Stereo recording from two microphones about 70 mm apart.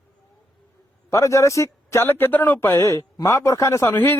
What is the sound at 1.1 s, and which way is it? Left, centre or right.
Speech, left.